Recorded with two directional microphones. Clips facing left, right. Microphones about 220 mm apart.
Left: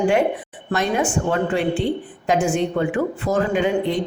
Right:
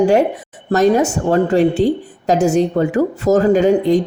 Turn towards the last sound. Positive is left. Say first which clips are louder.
# right 7 dB
turn(degrees=-40)  # may be behind; listen again after turning